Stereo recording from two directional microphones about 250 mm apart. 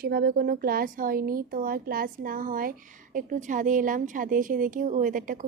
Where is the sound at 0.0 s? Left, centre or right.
Right.